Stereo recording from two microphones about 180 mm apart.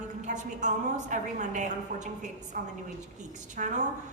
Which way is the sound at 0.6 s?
40° right (ahead or behind).